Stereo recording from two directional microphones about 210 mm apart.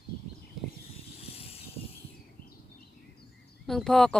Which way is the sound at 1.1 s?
30° left (ahead or behind).